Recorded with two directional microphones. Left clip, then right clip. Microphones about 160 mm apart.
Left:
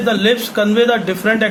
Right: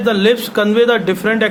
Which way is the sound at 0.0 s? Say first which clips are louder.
Right 1 dB; 35° right (ahead or behind).